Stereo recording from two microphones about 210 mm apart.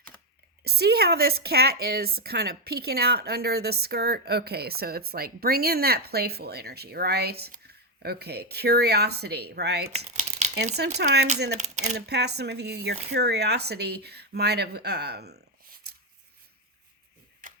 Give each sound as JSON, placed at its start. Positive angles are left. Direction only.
{"t": 0.6, "sound": "a woman's voice", "side_deg": -50}
{"t": 9.9, "sound": "crumpling", "side_deg": -30}
{"t": 10.9, "sound": "a woman's voice", "side_deg": -50}
{"t": 11.5, "sound": "speech", "side_deg": -35}
{"t": 11.9, "sound": "a woman's voice", "side_deg": -50}
{"t": 15.9, "sound": "a sound", "side_deg": -50}